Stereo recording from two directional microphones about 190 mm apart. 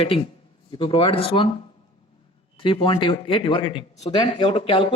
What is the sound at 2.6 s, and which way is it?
Speech, 30° left (ahead or behind).